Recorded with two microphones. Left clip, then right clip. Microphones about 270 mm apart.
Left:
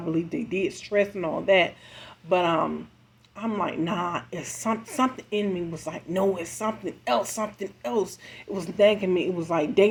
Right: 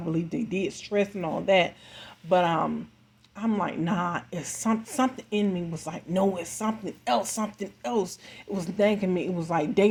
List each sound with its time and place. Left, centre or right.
0.1 s speech: right